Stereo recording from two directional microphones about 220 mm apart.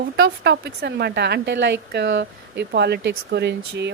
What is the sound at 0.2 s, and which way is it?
Speech, 50° right (ahead or behind).